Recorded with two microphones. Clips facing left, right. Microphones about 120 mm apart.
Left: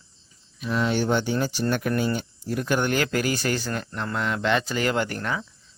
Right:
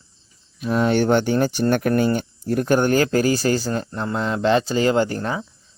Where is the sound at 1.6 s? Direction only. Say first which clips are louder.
Right 6 dB; 45° right (ahead or behind).